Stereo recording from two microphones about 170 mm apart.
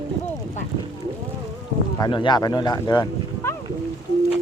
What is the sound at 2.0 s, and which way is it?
Speech, 25° left (ahead or behind).